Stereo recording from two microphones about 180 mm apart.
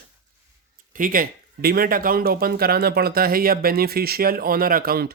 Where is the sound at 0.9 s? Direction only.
50° right (ahead or behind).